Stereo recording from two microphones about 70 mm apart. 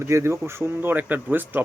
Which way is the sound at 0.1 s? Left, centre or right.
Right.